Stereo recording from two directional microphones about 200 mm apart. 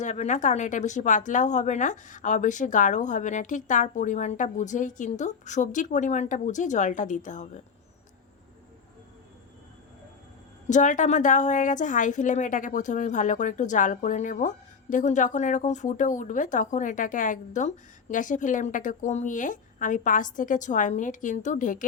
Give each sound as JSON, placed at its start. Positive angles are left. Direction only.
{"t": 0.0, "sound": "speech", "side_deg": 35}
{"t": 10.7, "sound": "speech", "side_deg": 40}